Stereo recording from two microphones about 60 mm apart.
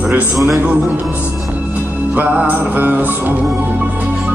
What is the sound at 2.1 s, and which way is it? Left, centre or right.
Music, right.